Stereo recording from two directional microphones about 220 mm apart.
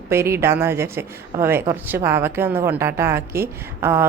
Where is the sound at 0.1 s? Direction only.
10° right (ahead or behind).